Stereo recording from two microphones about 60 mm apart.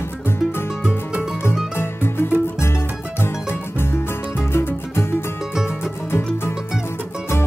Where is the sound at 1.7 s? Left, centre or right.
Left.